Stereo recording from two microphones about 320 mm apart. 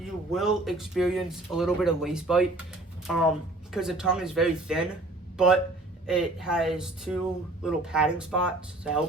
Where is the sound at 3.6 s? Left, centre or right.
Centre.